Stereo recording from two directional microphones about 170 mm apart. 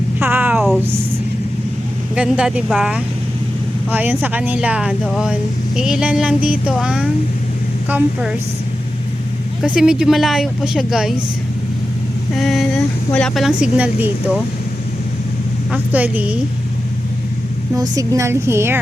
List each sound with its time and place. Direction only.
0.2 s a sound: 10° right (ahead or behind)
2.1 s speech: 5° right (ahead or behind)
9.6 s speech: 5° right (ahead or behind)
12.3 s speech: centre (ahead or behind)
15.7 s speech: 10° right (ahead or behind)
17.7 s speech: 20° right (ahead or behind)